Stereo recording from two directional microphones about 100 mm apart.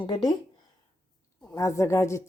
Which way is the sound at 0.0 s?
45° left (ahead or behind).